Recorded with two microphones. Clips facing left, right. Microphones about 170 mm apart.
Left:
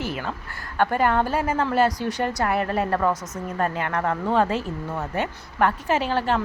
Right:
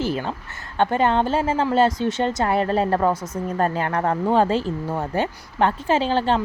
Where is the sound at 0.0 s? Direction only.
30° right (ahead or behind).